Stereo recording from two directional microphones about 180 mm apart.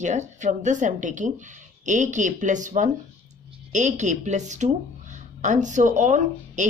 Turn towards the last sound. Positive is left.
turn(degrees=-45)  # may be behind; listen again after turning